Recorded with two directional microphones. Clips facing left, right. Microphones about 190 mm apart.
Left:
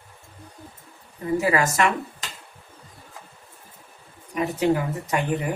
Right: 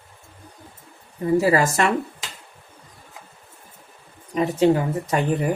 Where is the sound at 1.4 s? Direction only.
35° right (ahead or behind).